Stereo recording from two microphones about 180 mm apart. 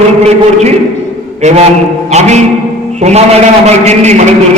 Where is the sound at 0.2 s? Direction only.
35° right (ahead or behind).